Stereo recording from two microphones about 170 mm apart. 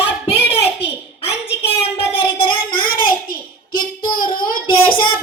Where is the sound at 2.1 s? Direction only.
30° left (ahead or behind).